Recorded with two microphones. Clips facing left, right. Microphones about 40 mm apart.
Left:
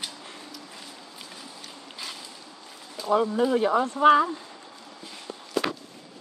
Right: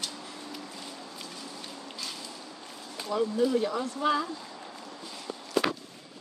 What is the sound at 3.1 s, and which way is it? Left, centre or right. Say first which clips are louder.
Speech: left 4 dB; left.